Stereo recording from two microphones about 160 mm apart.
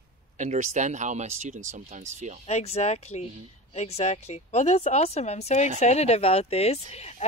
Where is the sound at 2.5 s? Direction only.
40° left (ahead or behind).